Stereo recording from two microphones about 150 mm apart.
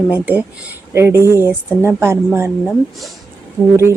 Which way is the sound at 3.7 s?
20° right (ahead or behind).